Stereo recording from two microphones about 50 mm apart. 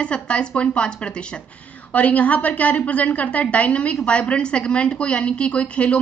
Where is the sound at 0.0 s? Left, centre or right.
Left.